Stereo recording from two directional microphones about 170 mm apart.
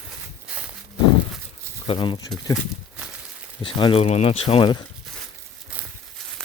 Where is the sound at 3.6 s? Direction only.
30° left (ahead or behind).